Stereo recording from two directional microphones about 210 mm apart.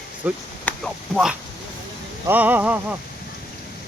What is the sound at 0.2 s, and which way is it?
Speech, 5° right (ahead or behind).